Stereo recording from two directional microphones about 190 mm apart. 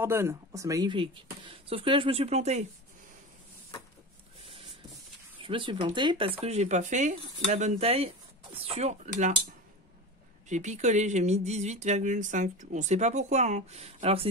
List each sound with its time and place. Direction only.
0.0 s speech: 15° right (ahead or behind); by 2.6 s 35° right (ahead or behind)
5.4 s speech: 25° right (ahead or behind)
10.5 s speech: 40° right (ahead or behind)